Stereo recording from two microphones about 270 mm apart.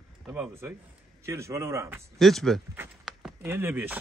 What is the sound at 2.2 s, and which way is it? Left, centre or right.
Speech, centre.